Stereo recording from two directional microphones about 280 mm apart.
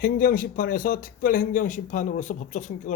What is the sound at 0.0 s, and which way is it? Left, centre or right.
Speech, left.